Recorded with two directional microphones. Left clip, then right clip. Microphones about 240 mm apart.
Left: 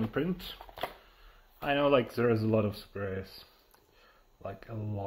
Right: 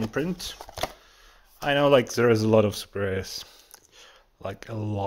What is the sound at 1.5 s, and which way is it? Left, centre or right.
Speech, right.